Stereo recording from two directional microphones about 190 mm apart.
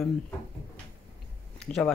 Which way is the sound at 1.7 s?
40° left (ahead or behind).